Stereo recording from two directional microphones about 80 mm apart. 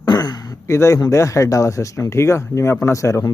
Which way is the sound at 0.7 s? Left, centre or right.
Left.